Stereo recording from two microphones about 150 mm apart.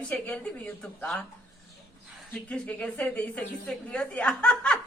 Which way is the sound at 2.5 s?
10° left (ahead or behind).